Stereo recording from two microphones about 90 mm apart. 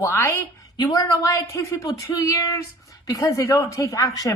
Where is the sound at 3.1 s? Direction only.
40° left (ahead or behind).